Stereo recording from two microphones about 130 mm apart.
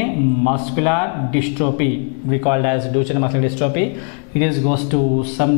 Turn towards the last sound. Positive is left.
turn(degrees=10)  # may be behind; listen again after turning